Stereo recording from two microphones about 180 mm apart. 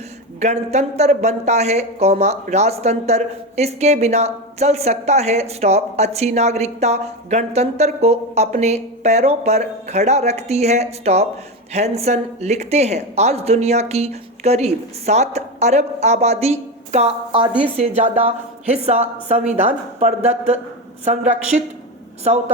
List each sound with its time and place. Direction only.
0.3 s speech: 40° right (ahead or behind)